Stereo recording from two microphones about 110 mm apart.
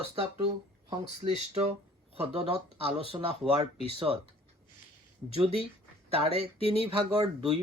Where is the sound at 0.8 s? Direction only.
65° right (ahead or behind).